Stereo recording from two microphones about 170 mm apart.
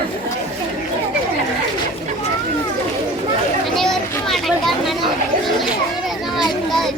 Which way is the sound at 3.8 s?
Centre (ahead or behind).